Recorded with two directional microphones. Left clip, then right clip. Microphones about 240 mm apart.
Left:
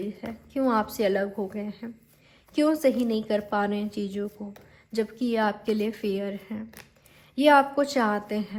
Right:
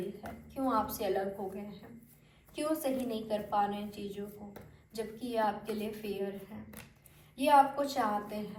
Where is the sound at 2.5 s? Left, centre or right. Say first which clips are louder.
Left 11 dB; left.